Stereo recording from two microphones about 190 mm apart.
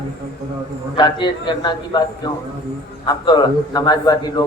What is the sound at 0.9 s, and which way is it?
A man's voice, 25° left (ahead or behind).